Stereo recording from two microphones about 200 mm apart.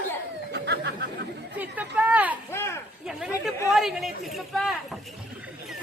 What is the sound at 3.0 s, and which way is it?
Chatter, centre (ahead or behind).